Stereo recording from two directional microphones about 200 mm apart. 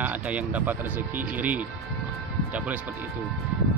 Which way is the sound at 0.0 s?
10° right (ahead or behind).